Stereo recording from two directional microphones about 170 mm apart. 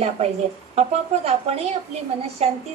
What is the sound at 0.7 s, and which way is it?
A woman's voice, 40° right (ahead or behind).